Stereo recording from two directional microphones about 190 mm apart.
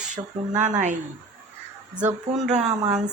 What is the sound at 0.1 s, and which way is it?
Speech, 40° right (ahead or behind).